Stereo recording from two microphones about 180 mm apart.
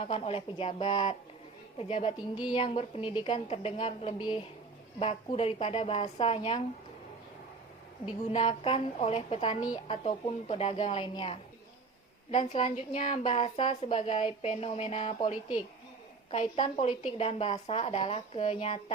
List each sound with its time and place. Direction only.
0.0 s a woman's voice: 30° left (ahead or behind)
8.3 s a woman's voice: 35° left (ahead or behind)
9.8 s a woman's voice: 35° left (ahead or behind)